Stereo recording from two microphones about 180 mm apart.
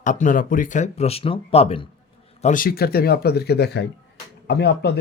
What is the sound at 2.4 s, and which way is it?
Speech, 45° left (ahead or behind).